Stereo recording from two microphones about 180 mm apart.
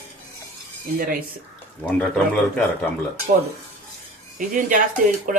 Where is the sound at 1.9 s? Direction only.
5° left (ahead or behind).